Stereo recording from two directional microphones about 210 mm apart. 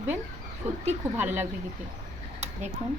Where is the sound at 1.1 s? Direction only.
10° right (ahead or behind).